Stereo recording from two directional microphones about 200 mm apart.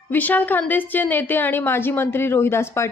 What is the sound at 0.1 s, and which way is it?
A woman's voice, 10° left (ahead or behind).